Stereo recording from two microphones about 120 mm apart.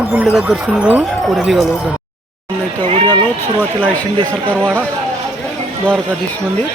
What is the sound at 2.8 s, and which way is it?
Speech, 45° right (ahead or behind).